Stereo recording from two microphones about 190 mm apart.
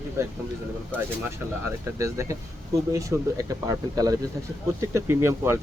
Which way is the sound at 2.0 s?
15° right (ahead or behind).